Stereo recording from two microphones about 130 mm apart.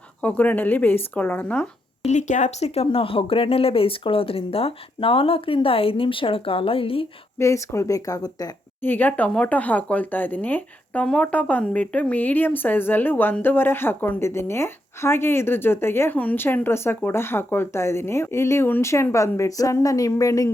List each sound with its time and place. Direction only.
0.2 s speech: 10° left (ahead or behind)
2.0 s speech: 70° left (ahead or behind); by 7.1 s 45° left (ahead or behind)
7.3 s speech: 20° left (ahead or behind)
8.8 s speech: 15° left (ahead or behind)